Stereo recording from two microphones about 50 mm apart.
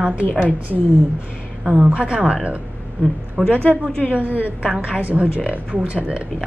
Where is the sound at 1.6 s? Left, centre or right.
Right.